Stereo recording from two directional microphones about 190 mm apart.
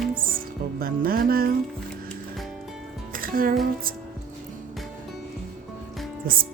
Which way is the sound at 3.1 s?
50° right (ahead or behind).